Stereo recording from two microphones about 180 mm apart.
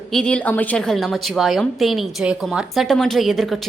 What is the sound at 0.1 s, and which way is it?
A woman's voice, 5° left (ahead or behind).